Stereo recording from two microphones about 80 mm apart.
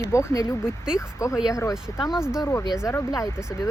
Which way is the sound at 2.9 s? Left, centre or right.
Left.